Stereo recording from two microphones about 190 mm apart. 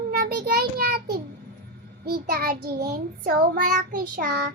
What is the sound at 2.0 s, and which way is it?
Child singing, 55° right (ahead or behind).